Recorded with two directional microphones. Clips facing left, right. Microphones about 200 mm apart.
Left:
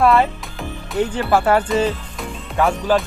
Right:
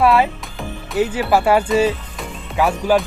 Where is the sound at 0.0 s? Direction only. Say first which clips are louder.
Even; 5° right (ahead or behind).